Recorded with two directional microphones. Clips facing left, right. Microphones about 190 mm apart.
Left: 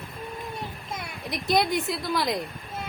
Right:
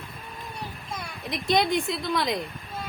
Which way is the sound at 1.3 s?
Centre (ahead or behind).